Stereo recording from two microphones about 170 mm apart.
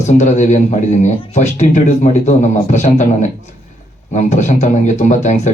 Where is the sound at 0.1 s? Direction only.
45° left (ahead or behind).